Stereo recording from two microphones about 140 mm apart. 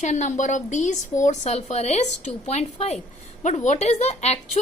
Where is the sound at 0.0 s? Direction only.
55° left (ahead or behind).